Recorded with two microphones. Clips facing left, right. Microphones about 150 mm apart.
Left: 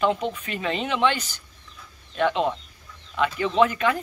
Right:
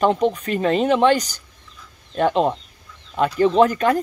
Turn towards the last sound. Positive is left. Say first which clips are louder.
# right 5 dB
turn(degrees=-40)  # may be behind; listen again after turning